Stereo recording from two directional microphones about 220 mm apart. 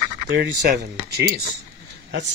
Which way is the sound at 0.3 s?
50° right (ahead or behind).